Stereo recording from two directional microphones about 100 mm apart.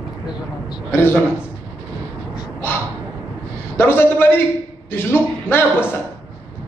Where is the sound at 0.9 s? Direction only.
20° left (ahead or behind).